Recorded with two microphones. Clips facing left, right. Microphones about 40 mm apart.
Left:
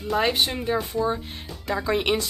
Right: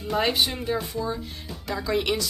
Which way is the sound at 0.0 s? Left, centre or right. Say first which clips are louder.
Left 2 dB; centre.